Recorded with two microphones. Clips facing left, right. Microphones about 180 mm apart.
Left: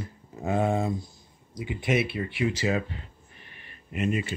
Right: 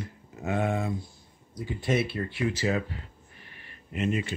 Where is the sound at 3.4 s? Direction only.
20° left (ahead or behind).